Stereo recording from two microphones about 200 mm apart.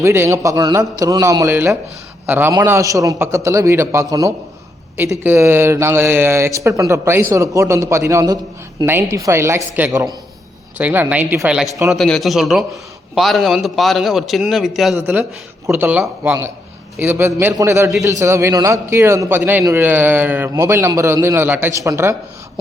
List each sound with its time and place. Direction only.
0.0 s speech: 15° right (ahead or behind)
5.2 s a man's voice: 10° right (ahead or behind)